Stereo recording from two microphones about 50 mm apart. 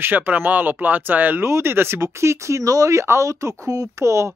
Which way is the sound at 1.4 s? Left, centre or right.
Right.